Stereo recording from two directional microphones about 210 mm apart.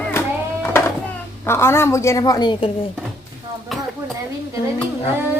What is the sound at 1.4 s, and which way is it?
A woman's voice, 10° left (ahead or behind).